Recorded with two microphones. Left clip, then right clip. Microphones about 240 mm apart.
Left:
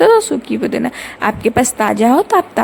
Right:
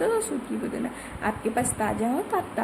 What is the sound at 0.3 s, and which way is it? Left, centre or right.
A woman's voice, left.